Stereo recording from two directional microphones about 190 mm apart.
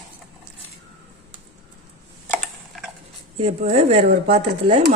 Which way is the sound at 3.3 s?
30° right (ahead or behind).